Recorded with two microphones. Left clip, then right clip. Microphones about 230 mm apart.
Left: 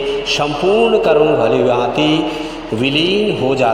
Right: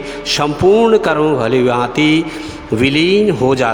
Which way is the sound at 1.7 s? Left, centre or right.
Right.